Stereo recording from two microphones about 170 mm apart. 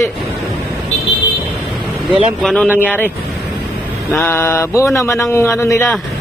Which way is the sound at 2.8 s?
10° left (ahead or behind).